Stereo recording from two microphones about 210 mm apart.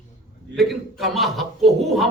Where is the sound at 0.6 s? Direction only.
Centre (ahead or behind).